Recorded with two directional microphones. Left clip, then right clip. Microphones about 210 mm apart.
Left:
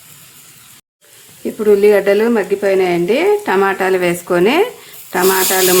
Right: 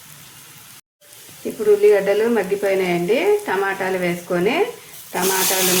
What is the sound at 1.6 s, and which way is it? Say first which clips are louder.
Speech: left 4 dB; 40° left (ahead or behind).